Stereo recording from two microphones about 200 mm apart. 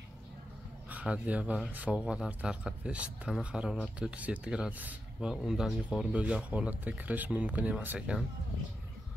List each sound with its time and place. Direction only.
0.8 s speech: 5° right (ahead or behind)